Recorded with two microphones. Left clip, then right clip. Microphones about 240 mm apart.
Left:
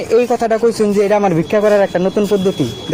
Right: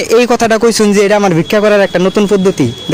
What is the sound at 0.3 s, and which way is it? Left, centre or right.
Speech, right.